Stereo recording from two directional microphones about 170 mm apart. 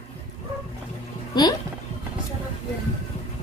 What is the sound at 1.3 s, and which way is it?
Speech, 25° left (ahead or behind).